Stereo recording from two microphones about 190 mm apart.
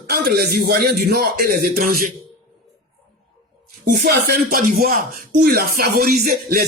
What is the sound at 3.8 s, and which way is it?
Speech, 55° right (ahead or behind).